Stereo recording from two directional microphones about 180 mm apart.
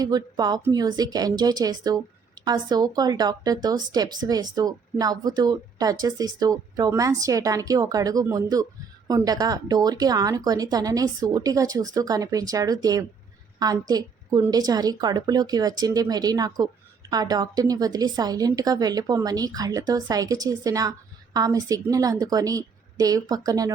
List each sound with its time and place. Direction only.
0.0 s speech: 20° right (ahead or behind)